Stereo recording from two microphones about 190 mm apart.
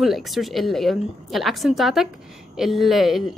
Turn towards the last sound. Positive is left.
turn(degrees=0)  # may be behind; listen again after turning